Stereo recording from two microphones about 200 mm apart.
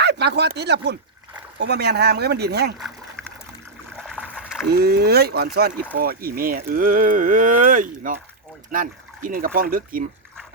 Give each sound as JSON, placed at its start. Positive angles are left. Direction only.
{"t": 0.0, "sound": "speech", "side_deg": -55}
{"t": 2.7, "sound": "a sound", "side_deg": 0}
{"t": 3.9, "sound": "water", "side_deg": 0}
{"t": 4.7, "sound": "speech", "side_deg": -50}